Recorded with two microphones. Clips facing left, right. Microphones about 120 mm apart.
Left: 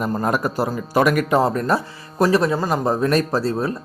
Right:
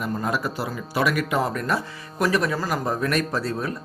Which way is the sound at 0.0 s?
45° left (ahead or behind).